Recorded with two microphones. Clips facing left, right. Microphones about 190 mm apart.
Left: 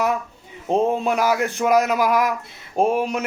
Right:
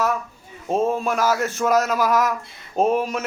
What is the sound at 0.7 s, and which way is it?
Speech, 20° left (ahead or behind).